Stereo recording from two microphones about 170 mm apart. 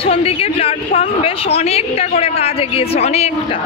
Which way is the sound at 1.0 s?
35° left (ahead or behind).